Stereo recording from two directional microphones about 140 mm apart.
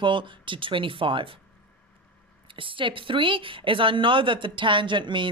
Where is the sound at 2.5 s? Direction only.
40° right (ahead or behind).